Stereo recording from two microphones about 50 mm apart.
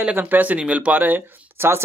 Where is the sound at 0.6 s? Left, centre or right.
Right.